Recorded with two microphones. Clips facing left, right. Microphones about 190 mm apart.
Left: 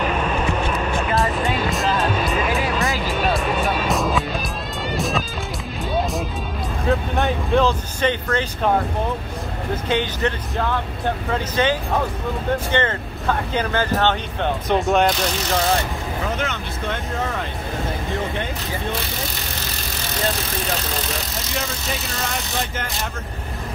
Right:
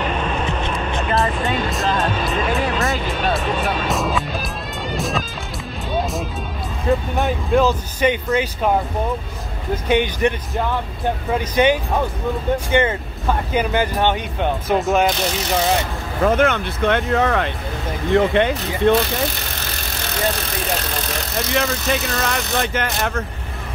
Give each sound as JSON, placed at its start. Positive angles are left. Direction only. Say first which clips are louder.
{"t": 0.2, "sound": "vehicle", "louder": "left 1 dB", "side_deg": 5}
{"t": 4.9, "sound": "music", "louder": "even", "side_deg": 0}
{"t": 6.9, "sound": "vehicle", "louder": "right 2 dB", "side_deg": 0}
{"t": 9.8, "sound": "speech", "louder": "right 5 dB", "side_deg": -15}
{"t": 11.5, "sound": "speech", "louder": "right 4 dB", "side_deg": -15}
{"t": 14.7, "sound": "speech", "louder": "even", "side_deg": 0}
{"t": 16.3, "sound": "speech", "louder": "right 13 dB", "side_deg": -55}
{"t": 21.5, "sound": "speech", "louder": "right 7 dB", "side_deg": -70}